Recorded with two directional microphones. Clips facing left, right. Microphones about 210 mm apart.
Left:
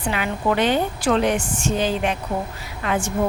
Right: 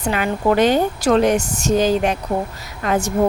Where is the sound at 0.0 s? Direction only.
45° right (ahead or behind).